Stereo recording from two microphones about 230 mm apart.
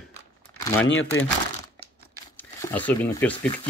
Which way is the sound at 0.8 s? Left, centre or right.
Left.